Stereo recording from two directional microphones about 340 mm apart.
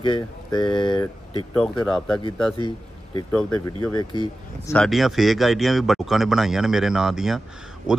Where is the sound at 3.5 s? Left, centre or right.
Left.